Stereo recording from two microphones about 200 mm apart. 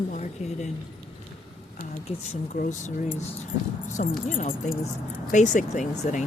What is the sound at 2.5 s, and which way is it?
Speech, 40° left (ahead or behind).